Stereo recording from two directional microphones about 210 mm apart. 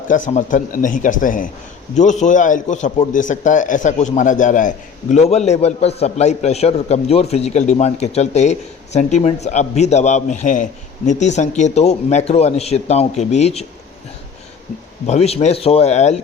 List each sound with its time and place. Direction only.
0.1 s a man's voice: 35° left (ahead or behind)
15.0 s a man's voice: 30° left (ahead or behind)